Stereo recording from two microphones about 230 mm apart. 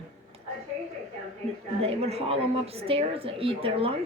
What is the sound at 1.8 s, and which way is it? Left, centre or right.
Speech, right.